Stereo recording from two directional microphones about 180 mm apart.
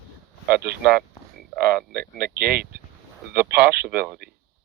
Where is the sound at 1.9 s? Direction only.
60° right (ahead or behind).